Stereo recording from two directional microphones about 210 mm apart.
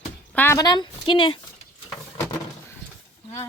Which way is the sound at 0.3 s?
10° left (ahead or behind).